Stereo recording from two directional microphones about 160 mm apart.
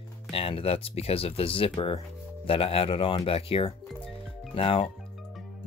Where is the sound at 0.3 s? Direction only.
35° left (ahead or behind).